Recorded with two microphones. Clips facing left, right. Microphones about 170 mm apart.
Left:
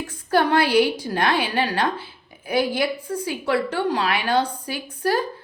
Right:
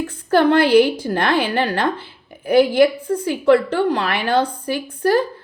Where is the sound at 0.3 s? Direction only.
55° right (ahead or behind).